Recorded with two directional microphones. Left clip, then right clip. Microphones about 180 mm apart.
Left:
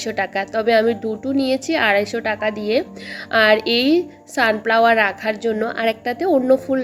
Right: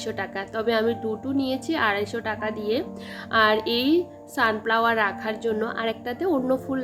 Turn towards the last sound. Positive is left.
turn(degrees=15)  # may be behind; listen again after turning